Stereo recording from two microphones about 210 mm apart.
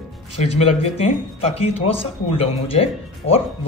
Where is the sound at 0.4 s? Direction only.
30° left (ahead or behind).